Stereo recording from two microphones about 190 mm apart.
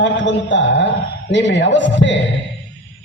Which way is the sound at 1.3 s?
70° left (ahead or behind).